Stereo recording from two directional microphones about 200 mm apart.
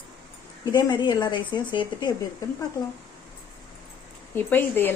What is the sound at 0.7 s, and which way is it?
Speech, 20° left (ahead or behind).